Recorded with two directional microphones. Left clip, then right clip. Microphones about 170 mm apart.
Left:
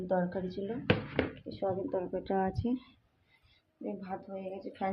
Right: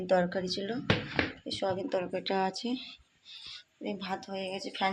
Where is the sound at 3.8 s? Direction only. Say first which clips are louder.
Right 3 dB; 10° right (ahead or behind).